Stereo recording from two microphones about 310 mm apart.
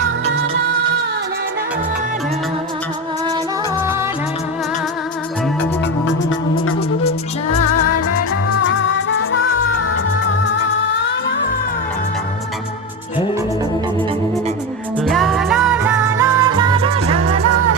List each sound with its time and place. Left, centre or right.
7.5 s music: left
15.0 s music: centre
17.4 s music: right